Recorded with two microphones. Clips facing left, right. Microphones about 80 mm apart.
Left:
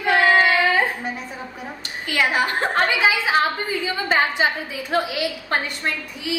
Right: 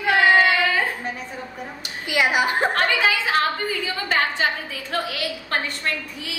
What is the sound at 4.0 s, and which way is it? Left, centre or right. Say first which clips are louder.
A woman's voice: left 3 dB; centre.